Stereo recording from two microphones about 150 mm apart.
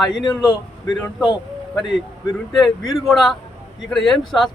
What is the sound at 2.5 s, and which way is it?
A man's voice, centre (ahead or behind).